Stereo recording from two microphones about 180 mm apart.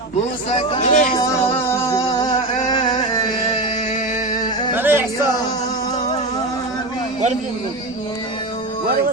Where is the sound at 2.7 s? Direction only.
25° left (ahead or behind).